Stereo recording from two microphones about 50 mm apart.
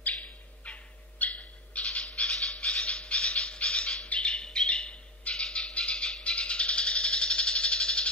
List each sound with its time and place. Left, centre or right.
0.0 s bird: left
1.2 s owl: left
2.0 s a sound: centre
3.2 s bird: centre
5.5 s a sound: left
6.2 s rattle: left